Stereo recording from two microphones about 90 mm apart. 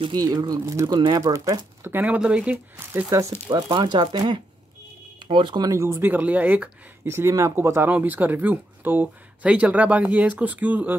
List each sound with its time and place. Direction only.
0.1 s speech: 50° right (ahead or behind)
1.2 s speech: 35° right (ahead or behind)
1.8 s speech: 25° right (ahead or behind)
2.5 s speech: 25° right (ahead or behind)
3.1 s speech: 40° right (ahead or behind); by 5.7 s 60° right (ahead or behind)
5.7 s speech: 30° right (ahead or behind)